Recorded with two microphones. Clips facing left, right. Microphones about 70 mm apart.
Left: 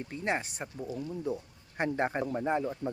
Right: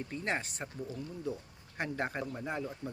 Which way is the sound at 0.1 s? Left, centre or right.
Centre.